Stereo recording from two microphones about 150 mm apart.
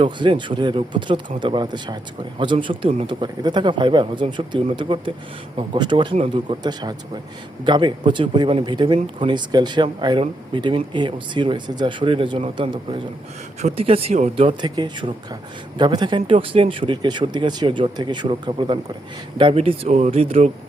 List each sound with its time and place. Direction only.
0.0 s speech: 35° right (ahead or behind)
13.6 s speech: 45° right (ahead or behind)
14.6 s speech: 30° right (ahead or behind)